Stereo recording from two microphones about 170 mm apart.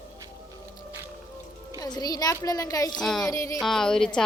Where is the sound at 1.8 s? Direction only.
25° left (ahead or behind).